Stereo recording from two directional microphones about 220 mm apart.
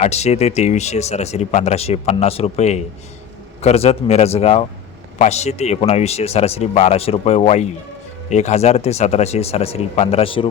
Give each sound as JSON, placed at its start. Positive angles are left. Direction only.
{"t": 0.0, "sound": "speech", "side_deg": 30}